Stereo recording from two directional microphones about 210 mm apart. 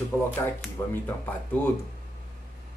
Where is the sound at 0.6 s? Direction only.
10° left (ahead or behind).